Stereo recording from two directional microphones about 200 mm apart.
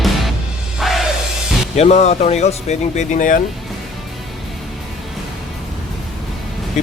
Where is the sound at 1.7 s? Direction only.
35° left (ahead or behind).